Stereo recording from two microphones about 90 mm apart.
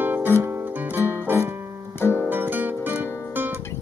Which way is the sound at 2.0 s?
25° left (ahead or behind).